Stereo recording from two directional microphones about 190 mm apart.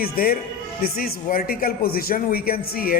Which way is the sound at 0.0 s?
50° left (ahead or behind).